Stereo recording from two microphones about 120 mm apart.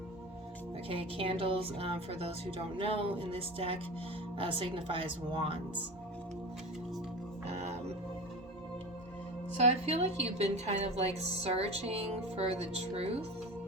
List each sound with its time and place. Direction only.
0.9 s a woman's voice: 50° right (ahead or behind)
7.5 s music: 70° right (ahead or behind)
9.6 s a woman's voice: 65° right (ahead or behind)